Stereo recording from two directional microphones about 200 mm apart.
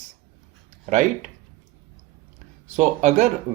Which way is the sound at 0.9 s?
40° right (ahead or behind).